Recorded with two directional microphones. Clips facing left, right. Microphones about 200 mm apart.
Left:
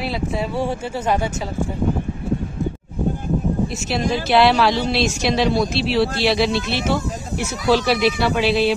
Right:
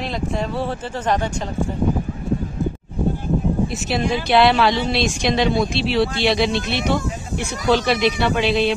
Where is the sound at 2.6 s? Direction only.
Centre (ahead or behind).